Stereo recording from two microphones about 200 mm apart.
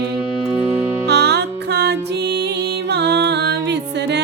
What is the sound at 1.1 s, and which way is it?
Music, 55° right (ahead or behind).